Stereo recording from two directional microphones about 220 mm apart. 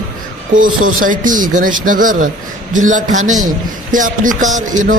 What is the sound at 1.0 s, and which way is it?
A man's voice, 35° right (ahead or behind).